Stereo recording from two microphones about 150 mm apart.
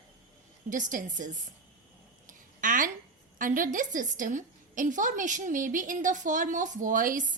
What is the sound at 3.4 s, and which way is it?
A woman's voice, 60° right (ahead or behind).